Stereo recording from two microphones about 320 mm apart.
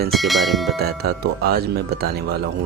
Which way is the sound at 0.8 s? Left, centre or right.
Right.